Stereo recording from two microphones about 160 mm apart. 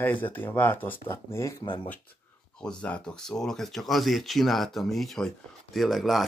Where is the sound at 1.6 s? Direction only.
30° left (ahead or behind).